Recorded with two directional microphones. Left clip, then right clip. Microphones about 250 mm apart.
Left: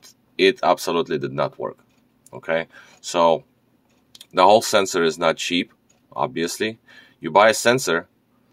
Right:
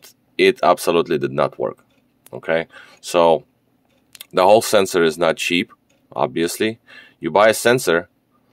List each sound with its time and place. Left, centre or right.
0.0 s speech: right